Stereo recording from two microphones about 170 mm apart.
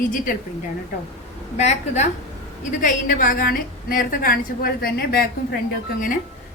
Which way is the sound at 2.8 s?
50° left (ahead or behind).